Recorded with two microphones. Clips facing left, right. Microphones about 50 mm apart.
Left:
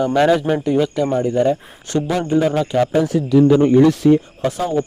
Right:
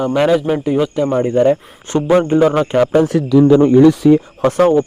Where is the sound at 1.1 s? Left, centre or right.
Right.